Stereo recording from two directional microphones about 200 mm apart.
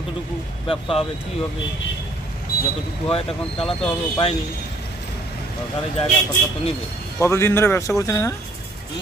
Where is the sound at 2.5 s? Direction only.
50° left (ahead or behind).